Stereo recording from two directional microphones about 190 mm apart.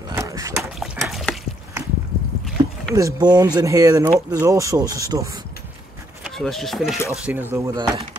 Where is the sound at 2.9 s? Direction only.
20° right (ahead or behind).